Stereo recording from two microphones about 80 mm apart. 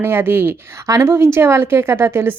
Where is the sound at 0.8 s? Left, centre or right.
Right.